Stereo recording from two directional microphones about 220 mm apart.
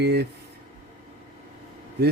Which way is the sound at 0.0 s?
50° right (ahead or behind).